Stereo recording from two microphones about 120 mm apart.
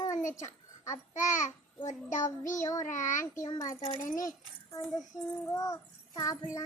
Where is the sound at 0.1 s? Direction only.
90° left.